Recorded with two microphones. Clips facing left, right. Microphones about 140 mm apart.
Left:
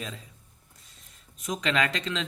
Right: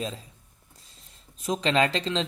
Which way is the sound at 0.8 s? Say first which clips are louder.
Right 1 dB; 30° right (ahead or behind).